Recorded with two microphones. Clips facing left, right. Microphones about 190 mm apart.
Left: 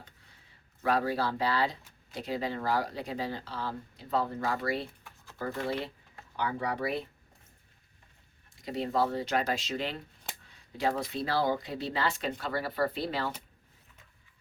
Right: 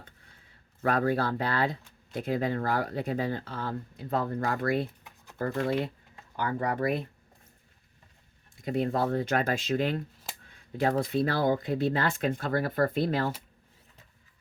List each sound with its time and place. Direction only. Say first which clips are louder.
0.8 s speech: right 2 dB; 50° right (ahead or behind)
5.0 s a sound: right 1 dB; 20° right (ahead or behind)
6.3 s speech: right 3 dB; 50° right (ahead or behind)
8.6 s speech: right 2 dB; 50° right (ahead or behind)
10.5 s a sound: right 3 dB; 55° right (ahead or behind)
11.1 s speech: right 4 dB; 50° right (ahead or behind)